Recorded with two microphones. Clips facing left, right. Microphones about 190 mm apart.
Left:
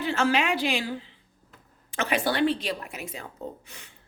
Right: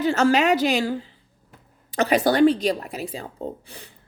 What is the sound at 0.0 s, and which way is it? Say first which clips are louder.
Speech: right 6 dB; 40° right (ahead or behind).